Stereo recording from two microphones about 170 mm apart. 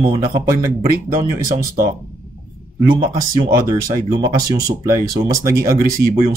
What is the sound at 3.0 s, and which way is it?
Speech, 20° right (ahead or behind).